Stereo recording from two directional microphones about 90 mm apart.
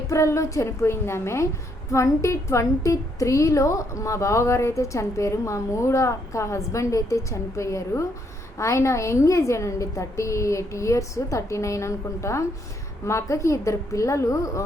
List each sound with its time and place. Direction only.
0.1 s a woman's voice: 35° left (ahead or behind)